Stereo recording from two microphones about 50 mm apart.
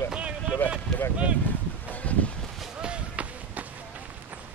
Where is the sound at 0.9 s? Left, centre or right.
Centre.